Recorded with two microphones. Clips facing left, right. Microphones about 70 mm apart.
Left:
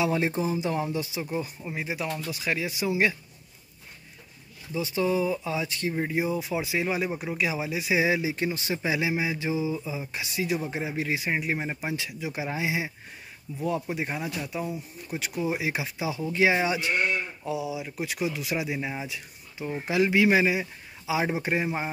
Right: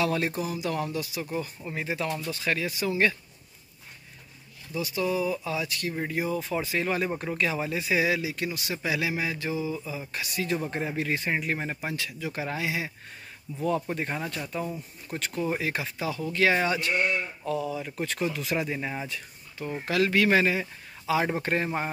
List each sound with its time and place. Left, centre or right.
0.0 s speech: centre
4.7 s speech: left
10.6 s speech: centre
13.6 s speech: centre